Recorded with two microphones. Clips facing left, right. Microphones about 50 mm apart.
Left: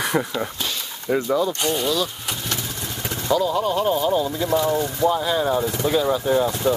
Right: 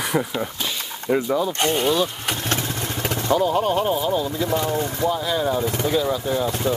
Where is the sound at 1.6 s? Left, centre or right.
Right.